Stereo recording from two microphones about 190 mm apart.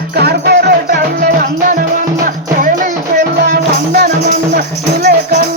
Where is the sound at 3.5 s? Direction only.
55° right (ahead or behind).